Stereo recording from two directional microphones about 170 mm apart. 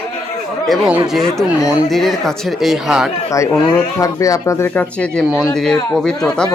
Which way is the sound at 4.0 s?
20° left (ahead or behind).